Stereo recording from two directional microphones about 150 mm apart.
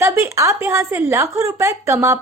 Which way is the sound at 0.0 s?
20° right (ahead or behind).